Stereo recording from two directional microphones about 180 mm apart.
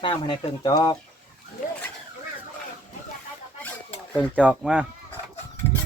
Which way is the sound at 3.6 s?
10° left (ahead or behind).